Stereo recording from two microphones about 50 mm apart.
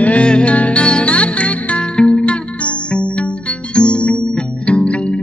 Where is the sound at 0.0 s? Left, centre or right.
Left.